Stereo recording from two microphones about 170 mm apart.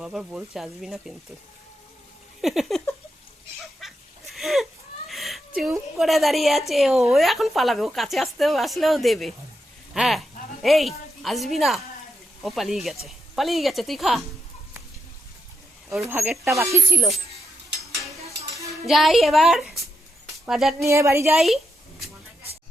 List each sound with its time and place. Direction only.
0.0 s speech: 5° right (ahead or behind)
2.4 s speech: centre (ahead or behind)
3.8 s a sound: centre (ahead or behind)
5.0 s chicken: centre (ahead or behind)
6.0 s speech: centre (ahead or behind)
16.0 s speech: 10° right (ahead or behind)
16.3 s speech: centre (ahead or behind)
16.6 s speech: 15° right (ahead or behind)
18.3 s cutlery: 20° right (ahead or behind)
18.9 s speech: centre (ahead or behind)
20.8 s speech: 15° right (ahead or behind)
21.3 s speech: centre (ahead or behind)